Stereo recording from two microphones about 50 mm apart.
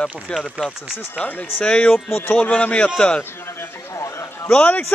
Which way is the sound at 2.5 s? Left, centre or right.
Left.